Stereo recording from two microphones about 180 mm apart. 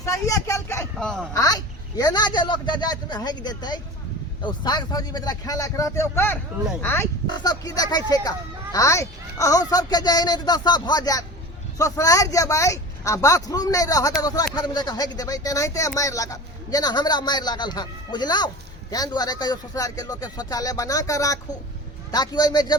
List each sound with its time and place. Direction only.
0.0 s a sound: 20° left (ahead or behind)
0.9 s speech: centre (ahead or behind)
1.3 s speech: 20° left (ahead or behind)